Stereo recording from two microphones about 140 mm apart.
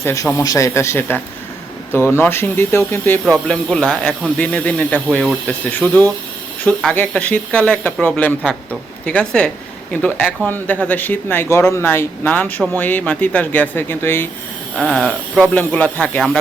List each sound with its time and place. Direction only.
0.0 s a man's voice: 20° left (ahead or behind)
3.2 s speech: centre (ahead or behind)
14.8 s speech: 5° left (ahead or behind)